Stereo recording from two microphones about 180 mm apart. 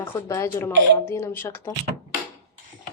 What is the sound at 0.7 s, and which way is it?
Speech, 80° right.